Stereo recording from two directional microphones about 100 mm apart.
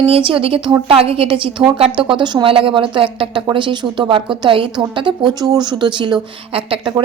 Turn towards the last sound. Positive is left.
turn(degrees=-65)  # may be behind; listen again after turning